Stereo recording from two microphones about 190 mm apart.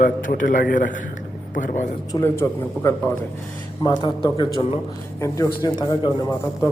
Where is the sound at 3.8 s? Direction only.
25° left (ahead or behind).